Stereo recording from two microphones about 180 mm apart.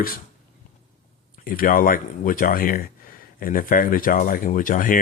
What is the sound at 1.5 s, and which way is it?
Speech, 50° left (ahead or behind).